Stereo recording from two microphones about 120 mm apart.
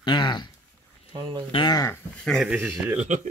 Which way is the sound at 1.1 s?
45° right (ahead or behind).